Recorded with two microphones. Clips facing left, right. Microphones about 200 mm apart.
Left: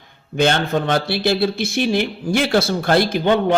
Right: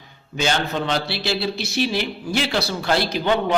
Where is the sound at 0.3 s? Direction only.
55° left (ahead or behind).